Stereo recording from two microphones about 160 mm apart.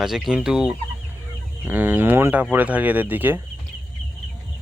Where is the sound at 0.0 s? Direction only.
5° right (ahead or behind).